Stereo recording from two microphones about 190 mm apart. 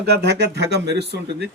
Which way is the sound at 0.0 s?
60° right (ahead or behind).